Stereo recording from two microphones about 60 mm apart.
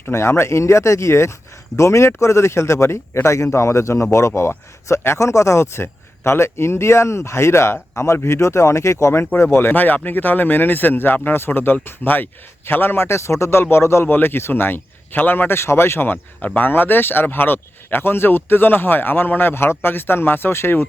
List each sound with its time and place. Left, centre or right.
0.1 s a man's voice: left
9.4 s speech: left